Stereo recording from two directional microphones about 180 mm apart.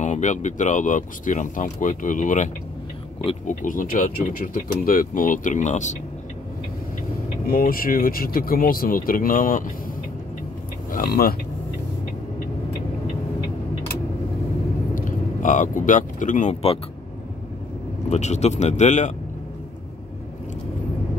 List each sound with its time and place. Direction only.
0.0 s speech: 40° left (ahead or behind)
7.4 s speech: 55° left (ahead or behind)
10.9 s speech: 55° left (ahead or behind)
15.0 s speech: 45° left (ahead or behind)
18.1 s speech: 40° left (ahead or behind)